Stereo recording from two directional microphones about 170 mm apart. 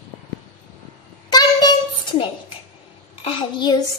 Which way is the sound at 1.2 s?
25° left (ahead or behind).